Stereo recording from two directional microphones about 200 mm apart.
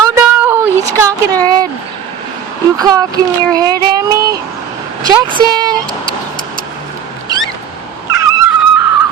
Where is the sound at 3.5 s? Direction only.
20° right (ahead or behind).